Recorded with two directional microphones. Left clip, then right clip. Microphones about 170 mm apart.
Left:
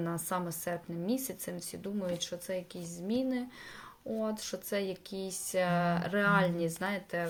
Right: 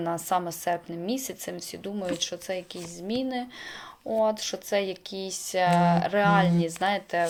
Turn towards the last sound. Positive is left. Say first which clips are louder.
# right 9 dB
turn(degrees=20)  # may be behind; listen again after turning